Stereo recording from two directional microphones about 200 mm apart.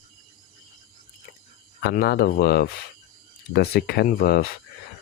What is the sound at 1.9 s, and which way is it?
Speech, 50° left (ahead or behind).